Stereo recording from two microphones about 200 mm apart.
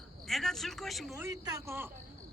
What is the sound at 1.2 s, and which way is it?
Speech, 15° right (ahead or behind).